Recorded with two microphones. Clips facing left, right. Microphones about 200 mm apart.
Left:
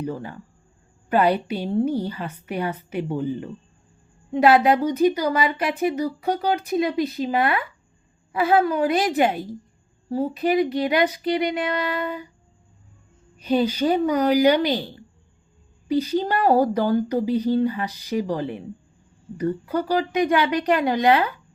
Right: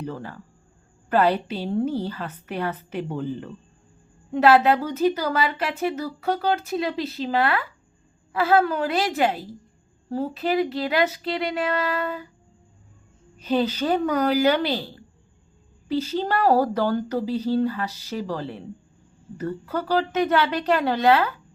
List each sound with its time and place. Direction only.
0.0 s speech: 15° left (ahead or behind)
13.4 s speech: 10° left (ahead or behind)